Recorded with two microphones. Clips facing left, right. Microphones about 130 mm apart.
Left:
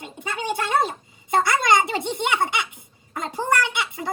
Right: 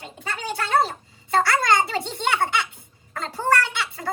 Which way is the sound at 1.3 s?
15° left (ahead or behind).